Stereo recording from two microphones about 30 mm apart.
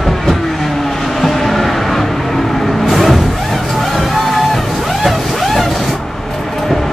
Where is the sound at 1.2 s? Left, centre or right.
Centre.